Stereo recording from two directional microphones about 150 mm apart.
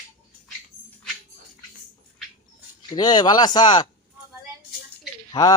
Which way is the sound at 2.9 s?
30° left (ahead or behind).